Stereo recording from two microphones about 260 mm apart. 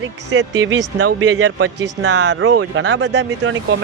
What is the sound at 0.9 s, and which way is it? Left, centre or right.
Speech, right.